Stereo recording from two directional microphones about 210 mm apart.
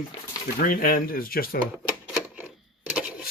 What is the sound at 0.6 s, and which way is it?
Speech, 40° left (ahead or behind).